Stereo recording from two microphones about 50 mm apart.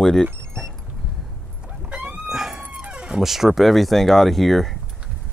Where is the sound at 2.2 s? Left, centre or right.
Centre.